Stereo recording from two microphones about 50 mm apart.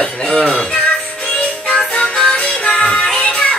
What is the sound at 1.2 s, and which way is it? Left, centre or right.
Music, left.